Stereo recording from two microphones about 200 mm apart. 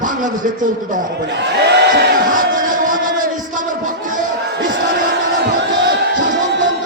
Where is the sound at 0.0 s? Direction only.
40° right (ahead or behind).